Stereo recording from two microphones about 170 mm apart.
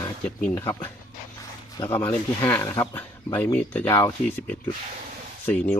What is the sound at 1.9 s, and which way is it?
Speech, 15° left (ahead or behind).